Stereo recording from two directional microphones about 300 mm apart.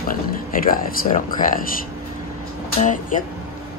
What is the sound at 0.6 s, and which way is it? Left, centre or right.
Speech, left.